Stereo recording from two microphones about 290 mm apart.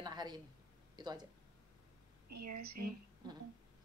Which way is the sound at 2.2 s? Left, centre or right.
Right.